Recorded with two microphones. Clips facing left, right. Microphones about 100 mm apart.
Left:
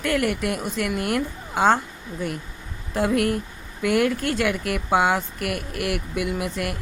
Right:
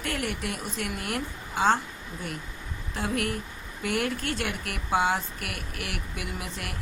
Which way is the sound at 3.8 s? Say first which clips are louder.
Left 8 dB; 60° left (ahead or behind).